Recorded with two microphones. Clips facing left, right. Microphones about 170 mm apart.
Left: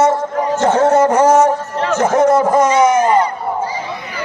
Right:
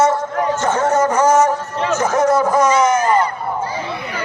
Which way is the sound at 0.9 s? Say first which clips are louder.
Left 1 dB; 60° left (ahead or behind).